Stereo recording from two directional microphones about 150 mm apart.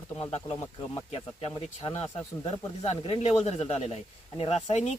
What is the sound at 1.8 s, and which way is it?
Speech, 30° left (ahead or behind).